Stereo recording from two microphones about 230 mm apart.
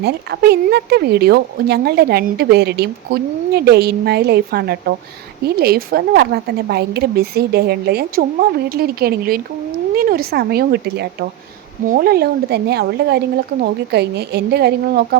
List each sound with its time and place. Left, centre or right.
0.0 s speech: right